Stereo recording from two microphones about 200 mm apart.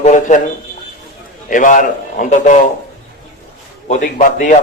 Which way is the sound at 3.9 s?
40° left (ahead or behind).